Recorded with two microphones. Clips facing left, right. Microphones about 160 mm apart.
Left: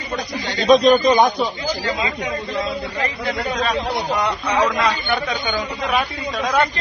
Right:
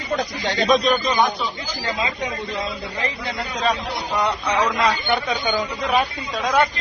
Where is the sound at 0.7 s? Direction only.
35° left (ahead or behind).